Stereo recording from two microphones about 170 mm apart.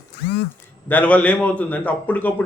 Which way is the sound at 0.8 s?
10° left (ahead or behind).